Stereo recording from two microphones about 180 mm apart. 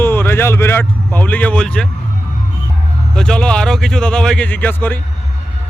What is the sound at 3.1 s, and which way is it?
Speech, 5° left (ahead or behind).